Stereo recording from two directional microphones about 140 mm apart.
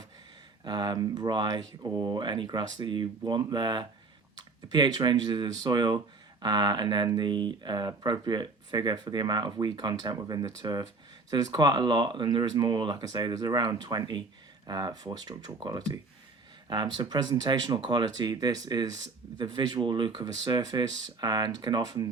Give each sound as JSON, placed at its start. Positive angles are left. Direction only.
{"t": 0.6, "sound": "speech", "side_deg": -30}